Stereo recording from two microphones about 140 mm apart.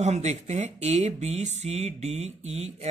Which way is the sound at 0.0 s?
55° right (ahead or behind).